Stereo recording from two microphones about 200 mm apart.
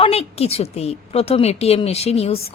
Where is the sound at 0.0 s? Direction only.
30° left (ahead or behind).